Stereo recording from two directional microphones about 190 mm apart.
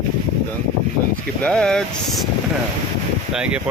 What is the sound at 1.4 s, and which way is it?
Speech, 5° left (ahead or behind).